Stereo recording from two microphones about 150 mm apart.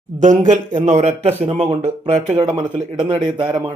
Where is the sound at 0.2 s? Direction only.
55° right (ahead or behind).